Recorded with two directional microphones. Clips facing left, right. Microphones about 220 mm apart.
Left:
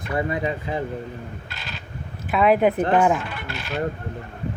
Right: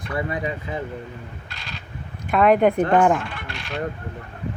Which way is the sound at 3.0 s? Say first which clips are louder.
Right 1 dB; 5° left (ahead or behind).